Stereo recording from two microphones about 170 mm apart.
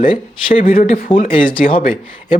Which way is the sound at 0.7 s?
55° left (ahead or behind).